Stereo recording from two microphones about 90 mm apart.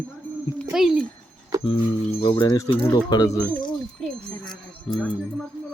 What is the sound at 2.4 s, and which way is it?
Speech, 45° left (ahead or behind).